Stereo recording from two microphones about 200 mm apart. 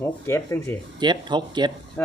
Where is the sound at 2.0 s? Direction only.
10° left (ahead or behind).